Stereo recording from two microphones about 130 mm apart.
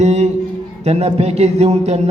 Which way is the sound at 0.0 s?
60° right (ahead or behind).